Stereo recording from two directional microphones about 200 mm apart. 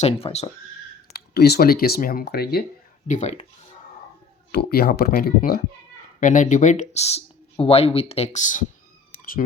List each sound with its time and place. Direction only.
0.0 s speech: 30° left (ahead or behind)
1.1 s speech: 50° left (ahead or behind)
3.1 s speech: 35° left (ahead or behind)
4.5 s speech: 50° left (ahead or behind)